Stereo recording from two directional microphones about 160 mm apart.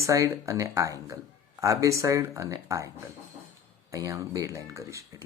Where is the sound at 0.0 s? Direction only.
20° right (ahead or behind).